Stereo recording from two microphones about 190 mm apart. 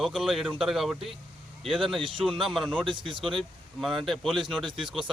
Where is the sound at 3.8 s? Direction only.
Centre (ahead or behind).